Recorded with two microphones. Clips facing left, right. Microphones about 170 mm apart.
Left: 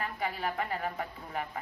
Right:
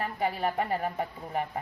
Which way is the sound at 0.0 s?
40° right (ahead or behind).